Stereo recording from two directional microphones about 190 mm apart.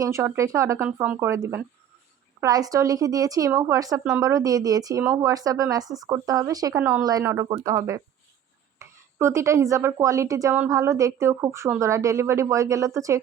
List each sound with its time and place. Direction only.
0.0 s speech: 15° right (ahead or behind)